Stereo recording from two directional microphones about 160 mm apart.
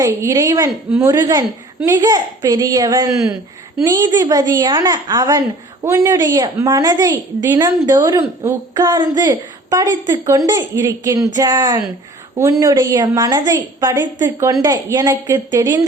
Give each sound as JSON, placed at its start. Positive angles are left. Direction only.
{"t": 0.0, "sound": "a woman's voice", "side_deg": -20}